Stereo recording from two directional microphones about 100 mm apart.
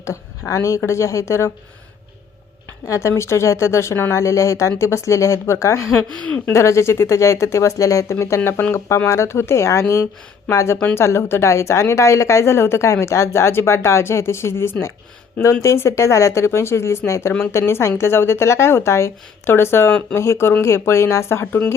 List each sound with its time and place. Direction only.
0.0 s a woman's voice: 30° left (ahead or behind)
2.8 s a woman's voice: 30° left (ahead or behind)
6.2 s a woman's voice: 15° left (ahead or behind)
6.5 s a woman's voice: 30° left (ahead or behind)
20.1 s a woman's voice: 25° left (ahead or behind)
21.4 s a woman's voice: 15° left (ahead or behind)